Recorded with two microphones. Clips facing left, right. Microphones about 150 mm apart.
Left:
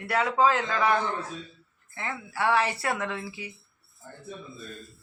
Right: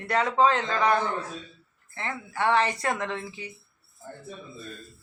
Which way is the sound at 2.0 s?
5° left (ahead or behind).